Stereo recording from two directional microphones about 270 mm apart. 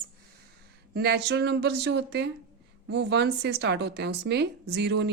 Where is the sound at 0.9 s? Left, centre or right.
Right.